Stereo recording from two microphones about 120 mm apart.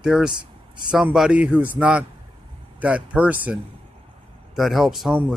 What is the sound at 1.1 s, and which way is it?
Speech, 5° right (ahead or behind).